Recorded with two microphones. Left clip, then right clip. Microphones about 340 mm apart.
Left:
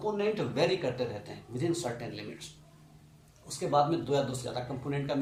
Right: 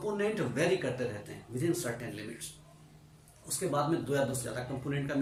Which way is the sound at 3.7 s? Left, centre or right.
Centre.